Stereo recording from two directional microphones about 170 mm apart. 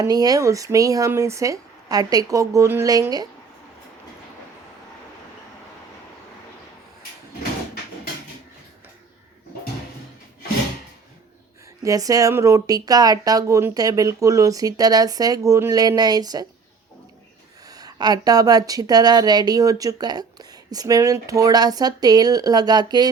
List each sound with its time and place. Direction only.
0.0 s speech: 20° right (ahead or behind)
11.8 s speech: 20° right (ahead or behind)
17.7 s speech: 20° right (ahead or behind)